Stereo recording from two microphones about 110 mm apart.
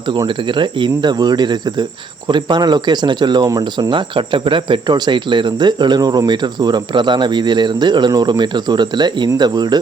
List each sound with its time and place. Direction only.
0.3 s speech: 50° right (ahead or behind)